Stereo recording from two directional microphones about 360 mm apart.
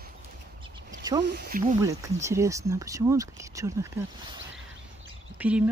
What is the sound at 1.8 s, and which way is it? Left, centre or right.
Speech, centre.